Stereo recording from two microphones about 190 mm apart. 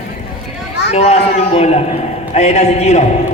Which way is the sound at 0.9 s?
35° left (ahead or behind).